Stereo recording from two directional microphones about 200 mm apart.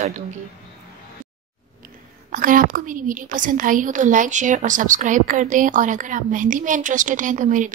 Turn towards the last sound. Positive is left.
turn(degrees=-40)  # may be behind; listen again after turning